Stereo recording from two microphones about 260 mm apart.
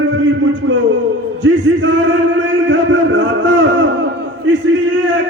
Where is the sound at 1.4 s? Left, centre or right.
Right.